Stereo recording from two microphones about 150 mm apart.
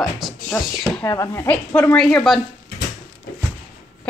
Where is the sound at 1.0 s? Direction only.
20° left (ahead or behind).